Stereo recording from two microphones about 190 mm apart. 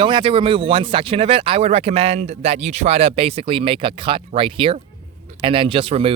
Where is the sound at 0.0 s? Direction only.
25° right (ahead or behind).